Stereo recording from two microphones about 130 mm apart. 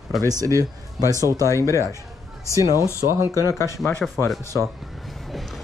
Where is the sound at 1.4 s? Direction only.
20° left (ahead or behind).